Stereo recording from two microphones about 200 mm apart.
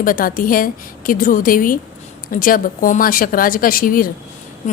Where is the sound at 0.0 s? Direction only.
45° left (ahead or behind).